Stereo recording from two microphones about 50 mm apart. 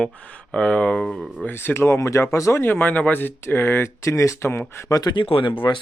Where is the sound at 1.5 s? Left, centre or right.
Left.